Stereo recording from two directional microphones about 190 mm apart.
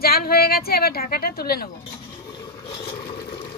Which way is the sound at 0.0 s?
55° left (ahead or behind).